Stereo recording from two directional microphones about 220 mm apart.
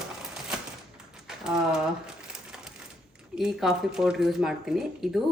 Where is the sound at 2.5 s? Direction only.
5° right (ahead or behind).